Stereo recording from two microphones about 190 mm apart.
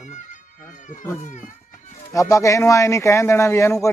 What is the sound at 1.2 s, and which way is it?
Speech, 40° left (ahead or behind).